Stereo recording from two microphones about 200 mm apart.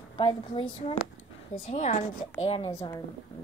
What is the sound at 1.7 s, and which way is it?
Speech, 40° left (ahead or behind).